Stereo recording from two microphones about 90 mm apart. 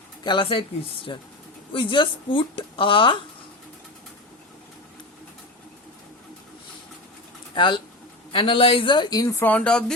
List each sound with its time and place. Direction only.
0.3 s a woman's voice: 75° left (ahead or behind)
1.1 s speech: 55° left (ahead or behind)
1.7 s a woman's voice: 70° left (ahead or behind)
7.5 s speech: 65° left (ahead or behind)
8.3 s a woman's voice: 85° left; by 9.2 s 55° left (ahead or behind)
9.4 s speech: 15° left (ahead or behind)